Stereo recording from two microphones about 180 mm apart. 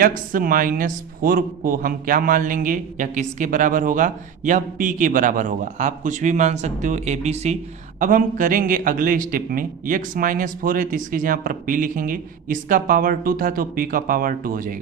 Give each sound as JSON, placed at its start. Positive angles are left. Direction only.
{"t": 0.0, "sound": "speech", "side_deg": -50}